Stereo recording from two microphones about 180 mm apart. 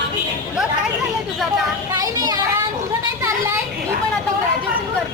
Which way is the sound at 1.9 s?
20° right (ahead or behind).